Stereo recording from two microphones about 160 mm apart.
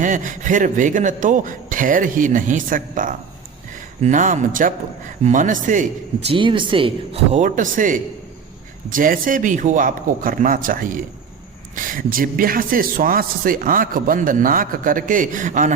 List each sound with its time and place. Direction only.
0.0 s a man's voice: 55° right (ahead or behind)
6.3 s speech: 30° right (ahead or behind)
7.4 s a man's voice: 55° right (ahead or behind)